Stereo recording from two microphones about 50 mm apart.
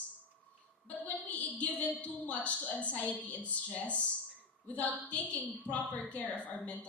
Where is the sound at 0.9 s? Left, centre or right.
Left.